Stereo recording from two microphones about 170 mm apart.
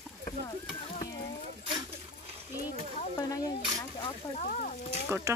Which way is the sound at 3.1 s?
20° left (ahead or behind).